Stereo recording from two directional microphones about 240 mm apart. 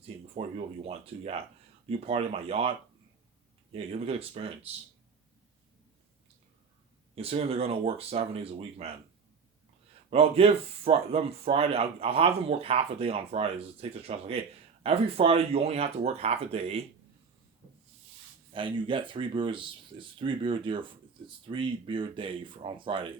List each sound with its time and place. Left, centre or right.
0.0 s speech: right
7.2 s speech: right
10.1 s speech: right
18.5 s speech: right